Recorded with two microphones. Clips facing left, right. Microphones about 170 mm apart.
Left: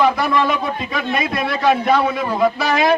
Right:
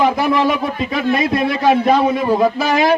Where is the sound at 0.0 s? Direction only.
15° right (ahead or behind).